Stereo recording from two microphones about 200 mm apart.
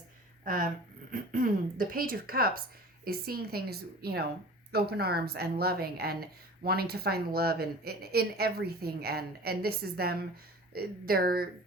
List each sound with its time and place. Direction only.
0.4 s speech: 40° right (ahead or behind)